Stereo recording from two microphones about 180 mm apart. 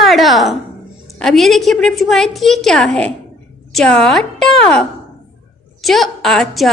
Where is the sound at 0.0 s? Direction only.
Centre (ahead or behind).